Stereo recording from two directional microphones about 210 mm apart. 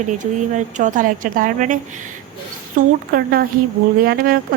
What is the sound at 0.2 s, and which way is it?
A woman's voice, 35° right (ahead or behind).